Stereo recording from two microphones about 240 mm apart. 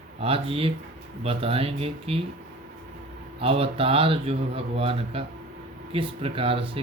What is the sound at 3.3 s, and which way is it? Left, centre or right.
Mantra, right.